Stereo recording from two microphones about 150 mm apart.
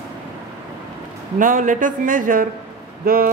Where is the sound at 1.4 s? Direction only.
60° right (ahead or behind).